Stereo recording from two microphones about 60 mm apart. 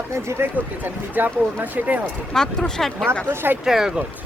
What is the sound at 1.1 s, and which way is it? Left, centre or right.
Speech, right.